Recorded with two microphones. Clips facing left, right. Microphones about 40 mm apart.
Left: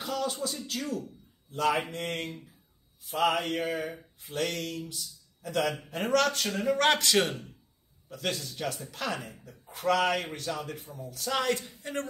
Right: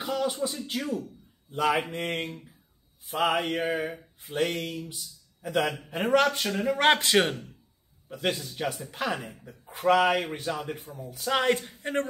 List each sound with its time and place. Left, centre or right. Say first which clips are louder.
0.0 s speech: right 3 dB; right
3.0 s mantra: right 1 dB; right
3.3 s speech: right 3 dB; centre
6.7 s a man's voice: right 3 dB; right